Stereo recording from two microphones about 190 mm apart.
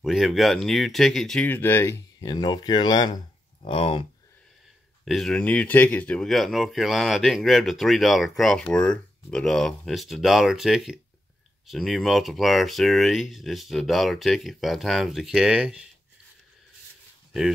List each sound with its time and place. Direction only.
0.0 s speech: centre (ahead or behind); by 4.0 s 30° left (ahead or behind)
5.0 s speech: centre (ahead or behind)